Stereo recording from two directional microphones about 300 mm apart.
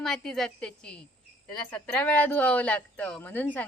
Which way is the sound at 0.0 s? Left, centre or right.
Centre.